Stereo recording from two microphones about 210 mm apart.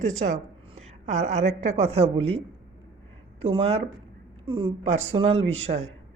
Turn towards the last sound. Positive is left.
turn(degrees=-30)  # may be behind; listen again after turning